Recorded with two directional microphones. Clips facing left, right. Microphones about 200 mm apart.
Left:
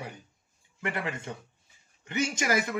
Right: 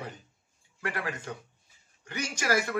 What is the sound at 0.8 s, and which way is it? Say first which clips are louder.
Speech: left 1 dB; 25° left (ahead or behind).